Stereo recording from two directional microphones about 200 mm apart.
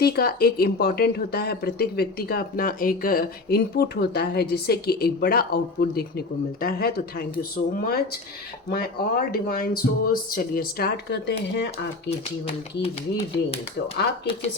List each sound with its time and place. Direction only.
0.0 s speech: 50° left (ahead or behind)
12.5 s speech: 30° left (ahead or behind)